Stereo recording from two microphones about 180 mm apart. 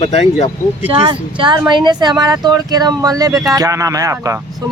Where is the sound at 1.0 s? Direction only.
25° right (ahead or behind).